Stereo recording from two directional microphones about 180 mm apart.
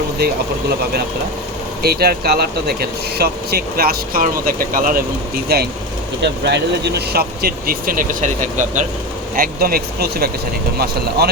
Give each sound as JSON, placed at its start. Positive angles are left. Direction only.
{"t": 1.8, "sound": "speech", "side_deg": -60}